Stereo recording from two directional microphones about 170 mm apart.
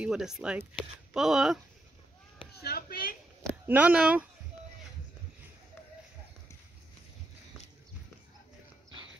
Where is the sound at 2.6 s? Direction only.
60° left (ahead or behind).